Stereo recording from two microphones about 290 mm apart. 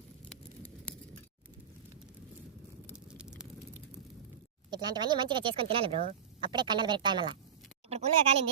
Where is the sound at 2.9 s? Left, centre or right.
Centre.